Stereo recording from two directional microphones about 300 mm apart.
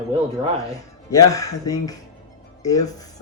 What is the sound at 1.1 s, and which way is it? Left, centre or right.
Speech, centre.